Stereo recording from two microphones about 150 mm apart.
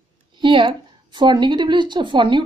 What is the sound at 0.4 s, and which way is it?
A woman's voice, 35° right (ahead or behind).